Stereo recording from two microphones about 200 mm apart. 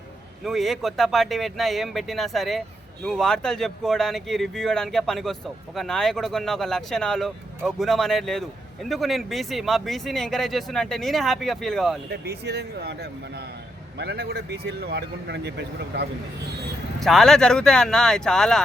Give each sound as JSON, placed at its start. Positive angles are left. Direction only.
{"t": 0.4, "sound": "speech", "side_deg": 0}
{"t": 12.2, "sound": "speech", "side_deg": -55}
{"t": 17.0, "sound": "speech", "side_deg": 0}